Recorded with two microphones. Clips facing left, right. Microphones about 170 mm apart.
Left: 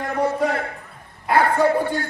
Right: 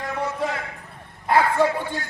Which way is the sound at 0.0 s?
55° left (ahead or behind).